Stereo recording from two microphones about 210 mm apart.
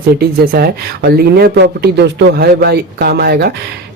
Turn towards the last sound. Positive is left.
turn(degrees=-50)  # may be behind; listen again after turning